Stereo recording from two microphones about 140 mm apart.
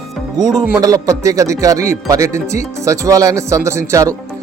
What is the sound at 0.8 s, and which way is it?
Speech, 25° right (ahead or behind).